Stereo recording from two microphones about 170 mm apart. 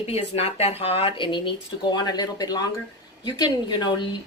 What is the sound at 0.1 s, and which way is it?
Speech, 35° left (ahead or behind).